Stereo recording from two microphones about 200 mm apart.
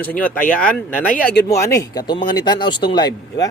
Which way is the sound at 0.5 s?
5° left (ahead or behind).